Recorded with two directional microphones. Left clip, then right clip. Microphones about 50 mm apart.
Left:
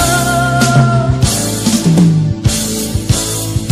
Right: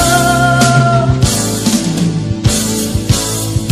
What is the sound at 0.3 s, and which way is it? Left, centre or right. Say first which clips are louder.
Music: right 2 dB; centre.